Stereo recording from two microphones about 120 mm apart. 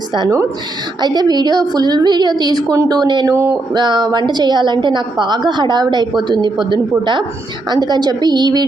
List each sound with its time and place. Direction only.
1.0 s a woman's voice: 35° right (ahead or behind)
3.3 s a sound: 20° right (ahead or behind)
3.8 s a woman's voice: 35° right (ahead or behind)